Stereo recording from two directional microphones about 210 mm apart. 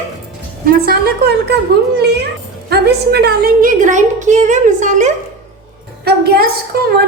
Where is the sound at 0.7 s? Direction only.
45° right (ahead or behind).